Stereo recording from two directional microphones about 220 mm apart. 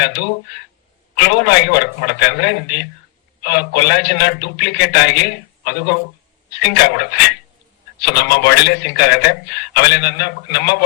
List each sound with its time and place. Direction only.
0.0 s a man's voice: 50° left (ahead or behind)